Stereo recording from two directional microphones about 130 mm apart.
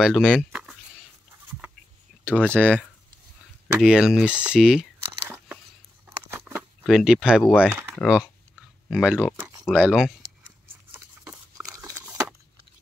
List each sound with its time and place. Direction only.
0.0 s speech: 5° right (ahead or behind)
2.3 s speech: 10° left (ahead or behind)
3.8 s speech: 5° right (ahead or behind)
6.0 s patter: 15° right (ahead or behind)
6.8 s speech: centre (ahead or behind)
8.0 s speech: 10° left (ahead or behind)
8.9 s speech: 5° right (ahead or behind)
10.9 s a sound: 10° right (ahead or behind)